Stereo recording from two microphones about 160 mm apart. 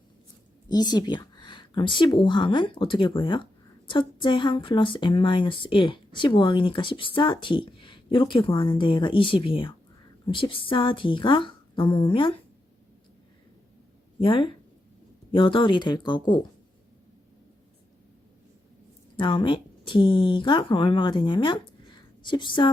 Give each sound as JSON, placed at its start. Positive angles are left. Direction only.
{"t": 0.7, "sound": "speech", "side_deg": 25}
{"t": 14.2, "sound": "speech", "side_deg": 30}
{"t": 19.1, "sound": "speech", "side_deg": 30}